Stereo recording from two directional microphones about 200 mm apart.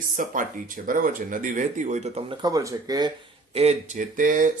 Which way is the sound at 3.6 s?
35° right (ahead or behind).